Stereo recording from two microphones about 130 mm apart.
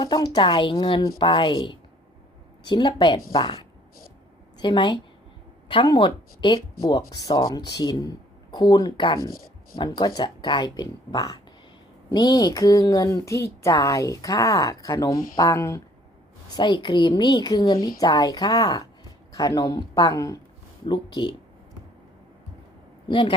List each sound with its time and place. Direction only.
0.0 s a woman's voice: 35° left (ahead or behind)
16.6 s a woman's voice: 35° left (ahead or behind)